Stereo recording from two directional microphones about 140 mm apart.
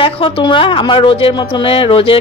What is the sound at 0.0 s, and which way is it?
Speech, 35° left (ahead or behind).